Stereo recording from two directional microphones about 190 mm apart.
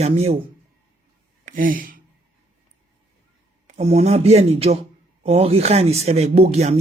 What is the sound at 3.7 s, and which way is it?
Speech, 35° right (ahead or behind).